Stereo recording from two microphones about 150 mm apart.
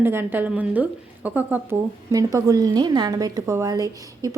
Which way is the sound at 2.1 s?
25° right (ahead or behind).